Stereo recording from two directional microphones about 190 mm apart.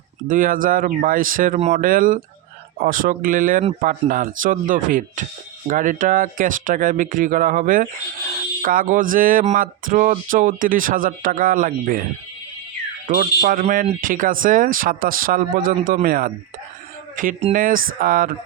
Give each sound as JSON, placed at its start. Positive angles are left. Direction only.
{"t": 0.3, "sound": "speech", "side_deg": -45}
{"t": 13.1, "sound": "speech", "side_deg": -45}